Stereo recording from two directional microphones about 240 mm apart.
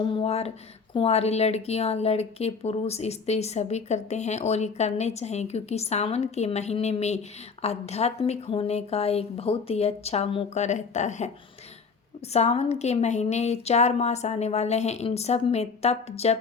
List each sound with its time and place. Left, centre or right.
0.0 s speech: left
12.3 s speech: left